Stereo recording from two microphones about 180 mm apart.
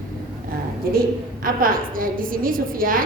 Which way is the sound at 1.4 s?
50° right (ahead or behind).